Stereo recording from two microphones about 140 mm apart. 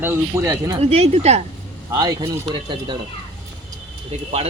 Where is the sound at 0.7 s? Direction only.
45° right (ahead or behind).